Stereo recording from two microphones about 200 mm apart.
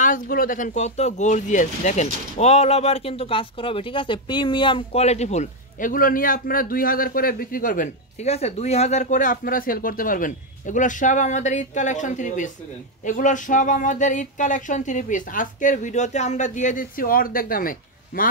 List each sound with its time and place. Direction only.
0.0 s speech: 45° left (ahead or behind)